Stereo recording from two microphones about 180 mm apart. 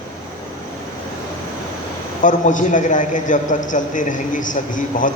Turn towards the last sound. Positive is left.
turn(degrees=45)  # may be behind; listen again after turning